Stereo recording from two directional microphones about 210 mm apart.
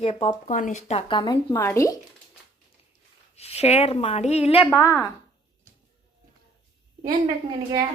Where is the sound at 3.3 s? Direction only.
30° left (ahead or behind).